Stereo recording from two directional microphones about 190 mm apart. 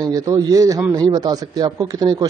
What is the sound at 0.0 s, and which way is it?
A man's voice, 20° right (ahead or behind).